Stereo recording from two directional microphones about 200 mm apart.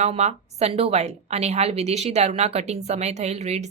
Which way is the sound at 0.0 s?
35° right (ahead or behind).